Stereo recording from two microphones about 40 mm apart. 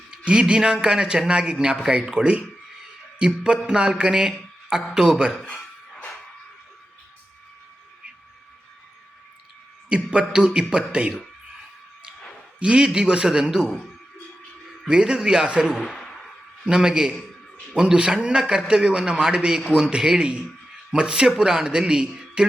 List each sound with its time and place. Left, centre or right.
0.3 s a man's voice: right
3.2 s a man's voice: right
9.9 s a man's voice: right
12.5 s a man's voice: right
14.8 s a man's voice: right
15.7 s a man's voice: centre
16.6 s a man's voice: right